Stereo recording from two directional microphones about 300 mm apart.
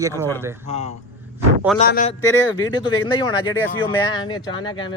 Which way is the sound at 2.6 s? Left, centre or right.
Centre.